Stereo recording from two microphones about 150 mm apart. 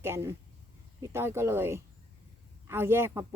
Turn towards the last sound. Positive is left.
turn(degrees=-15)  # may be behind; listen again after turning